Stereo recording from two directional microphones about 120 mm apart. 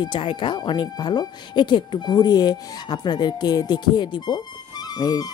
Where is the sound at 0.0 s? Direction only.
45° left (ahead or behind).